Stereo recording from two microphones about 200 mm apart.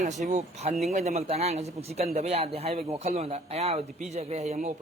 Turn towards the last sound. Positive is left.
turn(degrees=-35)  # may be behind; listen again after turning